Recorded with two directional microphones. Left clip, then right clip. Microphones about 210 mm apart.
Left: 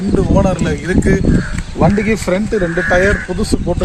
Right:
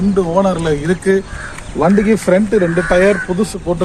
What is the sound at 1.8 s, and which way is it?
Speech, 45° left (ahead or behind).